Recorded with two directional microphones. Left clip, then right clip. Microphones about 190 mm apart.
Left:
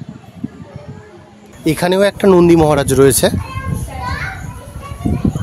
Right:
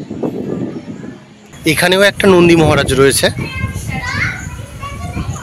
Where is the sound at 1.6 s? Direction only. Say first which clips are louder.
Right 3 dB; 10° left (ahead or behind).